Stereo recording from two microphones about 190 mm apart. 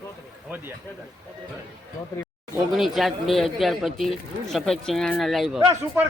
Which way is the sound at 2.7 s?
Centre (ahead or behind).